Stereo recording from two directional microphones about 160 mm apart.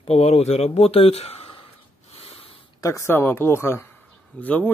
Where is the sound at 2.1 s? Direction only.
35° left (ahead or behind).